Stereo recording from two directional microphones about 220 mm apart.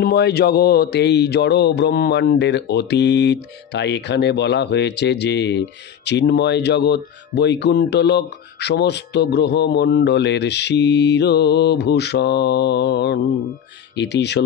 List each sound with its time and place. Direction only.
0.0 s speech: 45° left (ahead or behind)